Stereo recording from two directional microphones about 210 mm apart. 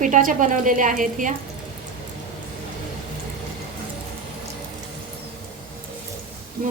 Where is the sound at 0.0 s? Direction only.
40° right (ahead or behind).